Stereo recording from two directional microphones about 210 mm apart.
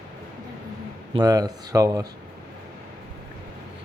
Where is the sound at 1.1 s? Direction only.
20° right (ahead or behind).